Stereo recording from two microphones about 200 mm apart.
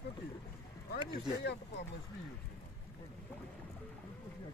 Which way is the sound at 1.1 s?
60° left (ahead or behind).